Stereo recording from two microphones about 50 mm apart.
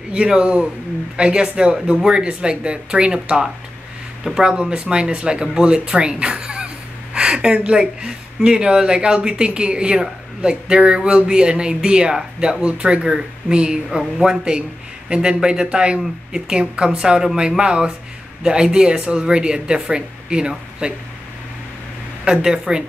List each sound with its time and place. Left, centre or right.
0.1 s speech: right
22.2 s speech: centre